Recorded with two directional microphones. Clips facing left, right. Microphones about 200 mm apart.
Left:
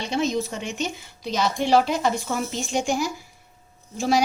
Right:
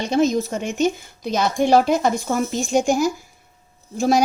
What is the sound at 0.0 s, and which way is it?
Speech, 45° right (ahead or behind).